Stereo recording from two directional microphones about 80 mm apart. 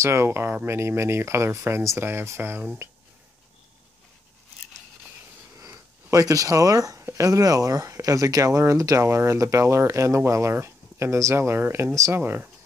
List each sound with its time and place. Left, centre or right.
0.0 s speech: right
5.6 s speech: right
12.1 s speech: right